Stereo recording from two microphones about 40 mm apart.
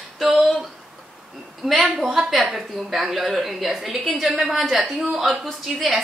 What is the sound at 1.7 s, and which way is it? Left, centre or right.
A woman's voice, centre.